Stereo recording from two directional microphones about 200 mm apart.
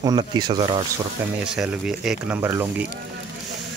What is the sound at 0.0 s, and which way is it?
Speech, 20° right (ahead or behind).